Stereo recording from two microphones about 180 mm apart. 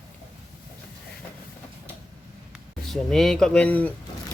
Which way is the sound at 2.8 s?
Centre (ahead or behind).